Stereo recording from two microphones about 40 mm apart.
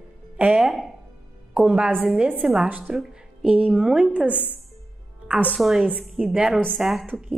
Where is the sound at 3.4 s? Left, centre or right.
Right.